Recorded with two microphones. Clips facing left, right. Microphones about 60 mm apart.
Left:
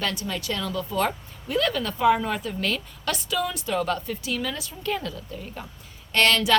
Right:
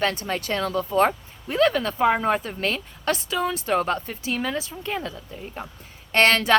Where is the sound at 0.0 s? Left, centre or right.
Right.